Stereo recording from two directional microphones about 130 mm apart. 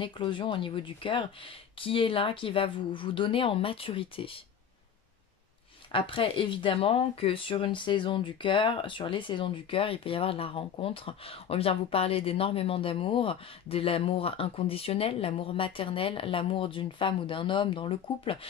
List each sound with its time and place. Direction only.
0.0 s speech: 40° left (ahead or behind)
5.9 s speech: 40° left (ahead or behind)